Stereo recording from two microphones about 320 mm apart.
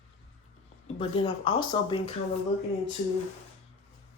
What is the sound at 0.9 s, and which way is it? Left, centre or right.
Speech, centre.